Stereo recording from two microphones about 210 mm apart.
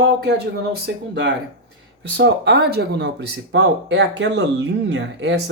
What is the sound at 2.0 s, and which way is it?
Speech, 55° right (ahead or behind).